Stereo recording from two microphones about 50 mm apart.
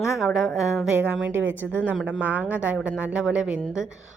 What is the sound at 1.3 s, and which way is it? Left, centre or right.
A woman's voice, right.